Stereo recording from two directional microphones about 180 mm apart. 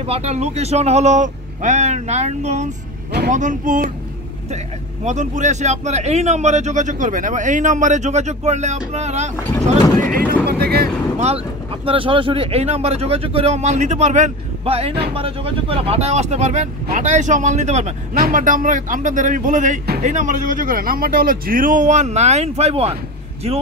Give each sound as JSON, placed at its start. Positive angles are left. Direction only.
{"t": 0.0, "sound": "speech", "side_deg": -35}
{"t": 5.0, "sound": "speech", "side_deg": -40}
{"t": 10.1, "sound": "speech", "side_deg": -60}
{"t": 11.1, "sound": "speech", "side_deg": -35}